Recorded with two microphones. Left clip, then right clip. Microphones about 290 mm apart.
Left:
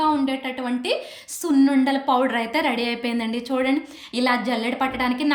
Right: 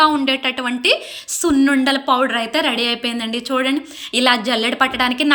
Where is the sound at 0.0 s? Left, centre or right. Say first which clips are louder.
Right 7 dB; centre.